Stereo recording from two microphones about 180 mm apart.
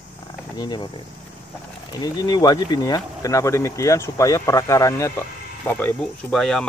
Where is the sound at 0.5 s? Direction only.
25° left (ahead or behind).